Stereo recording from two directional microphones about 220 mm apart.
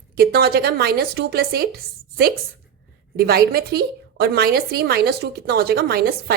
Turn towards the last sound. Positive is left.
turn(degrees=-45)  # may be behind; listen again after turning